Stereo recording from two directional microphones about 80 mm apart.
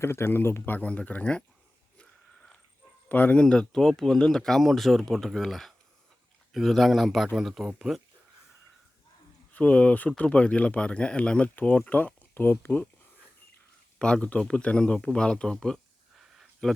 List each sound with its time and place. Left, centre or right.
0.0 s speech: left; by 1.5 s centre
2.0 s wheeze: centre
3.1 s speech: left
3.4 s speech: centre
9.5 s speech: centre
14.0 s speech: centre